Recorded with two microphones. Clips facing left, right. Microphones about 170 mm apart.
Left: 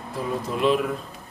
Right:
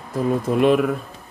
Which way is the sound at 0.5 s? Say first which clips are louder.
Right 5 dB; 55° right (ahead or behind).